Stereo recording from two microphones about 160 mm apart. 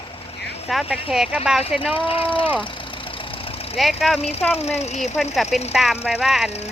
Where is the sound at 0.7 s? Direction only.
Centre (ahead or behind).